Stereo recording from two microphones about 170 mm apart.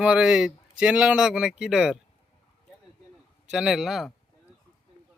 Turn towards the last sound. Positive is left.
turn(degrees=0)  # may be behind; listen again after turning